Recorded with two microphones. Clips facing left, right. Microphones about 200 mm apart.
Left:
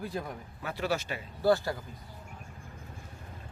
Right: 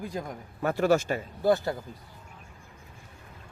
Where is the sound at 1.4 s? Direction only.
20° right (ahead or behind).